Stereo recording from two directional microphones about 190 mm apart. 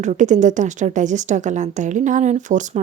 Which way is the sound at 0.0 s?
40° right (ahead or behind).